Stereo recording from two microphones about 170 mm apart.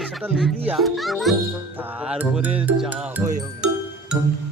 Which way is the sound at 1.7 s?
10° right (ahead or behind).